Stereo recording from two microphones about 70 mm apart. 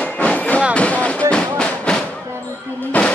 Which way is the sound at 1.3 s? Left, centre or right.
Centre.